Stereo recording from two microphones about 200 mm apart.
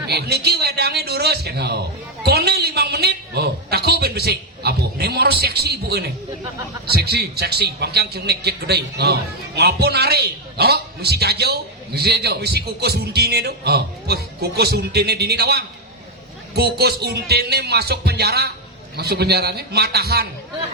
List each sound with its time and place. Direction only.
0.1 s a man's voice: 55° right (ahead or behind)
2.2 s a sound: 55° right (ahead or behind)
6.9 s a man's voice: 55° right (ahead or behind)